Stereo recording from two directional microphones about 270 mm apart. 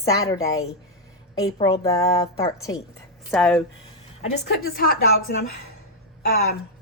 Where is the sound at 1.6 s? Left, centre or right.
Centre.